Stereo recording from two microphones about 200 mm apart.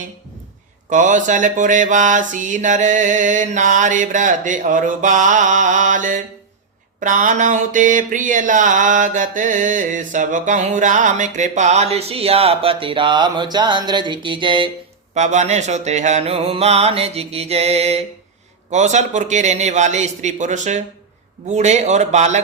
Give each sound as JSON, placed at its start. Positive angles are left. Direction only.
{"t": 0.9, "sound": "mantra", "side_deg": -40}
{"t": 15.1, "sound": "mantra", "side_deg": -35}